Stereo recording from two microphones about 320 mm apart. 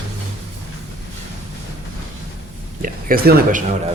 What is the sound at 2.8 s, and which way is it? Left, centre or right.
Speech, right.